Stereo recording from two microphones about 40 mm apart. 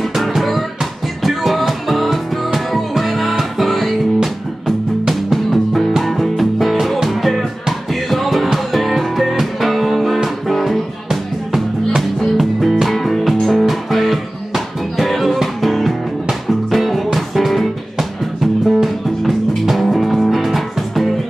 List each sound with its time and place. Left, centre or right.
0.1 s music: centre